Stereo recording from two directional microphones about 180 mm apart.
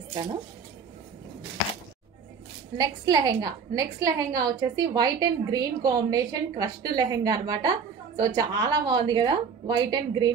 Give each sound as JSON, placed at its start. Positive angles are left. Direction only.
{"t": 0.1, "sound": "a woman's voice", "side_deg": -25}
{"t": 2.8, "sound": "a woman's voice", "side_deg": -25}